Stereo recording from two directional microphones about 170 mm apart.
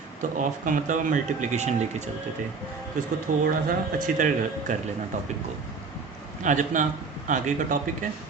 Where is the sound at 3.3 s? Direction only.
50° right (ahead or behind).